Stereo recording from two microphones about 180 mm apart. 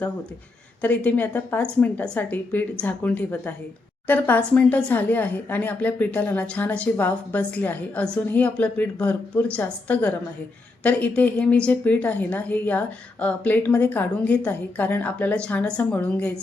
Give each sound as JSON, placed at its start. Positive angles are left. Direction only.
{"t": 0.8, "sound": "speech", "side_deg": 10}